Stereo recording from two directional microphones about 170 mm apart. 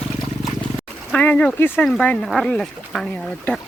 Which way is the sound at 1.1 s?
10° left (ahead or behind).